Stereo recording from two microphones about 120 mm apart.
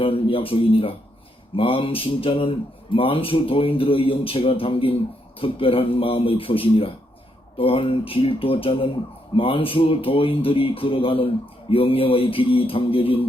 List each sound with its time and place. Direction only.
0.0 s speech: 50° left (ahead or behind)